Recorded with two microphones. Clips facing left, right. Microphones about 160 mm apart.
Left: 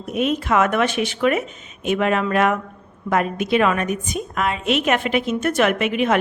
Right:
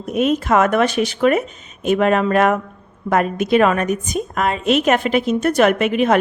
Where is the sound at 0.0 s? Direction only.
40° right (ahead or behind).